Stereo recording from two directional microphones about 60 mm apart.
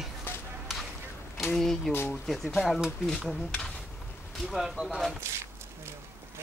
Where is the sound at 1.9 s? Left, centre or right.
Left.